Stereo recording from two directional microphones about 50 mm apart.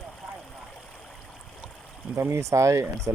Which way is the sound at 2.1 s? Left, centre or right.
Right.